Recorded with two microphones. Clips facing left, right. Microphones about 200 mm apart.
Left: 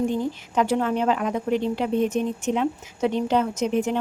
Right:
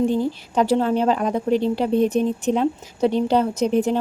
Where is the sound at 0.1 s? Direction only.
30° right (ahead or behind).